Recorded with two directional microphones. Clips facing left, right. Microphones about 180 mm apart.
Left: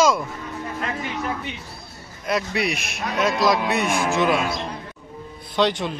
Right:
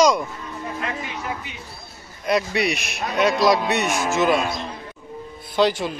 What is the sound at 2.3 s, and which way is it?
Speech, centre (ahead or behind).